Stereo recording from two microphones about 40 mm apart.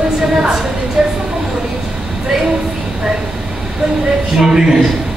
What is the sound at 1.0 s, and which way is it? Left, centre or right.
Vehicle, centre.